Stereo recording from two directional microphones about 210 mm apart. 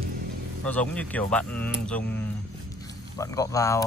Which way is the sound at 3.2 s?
15° left (ahead or behind).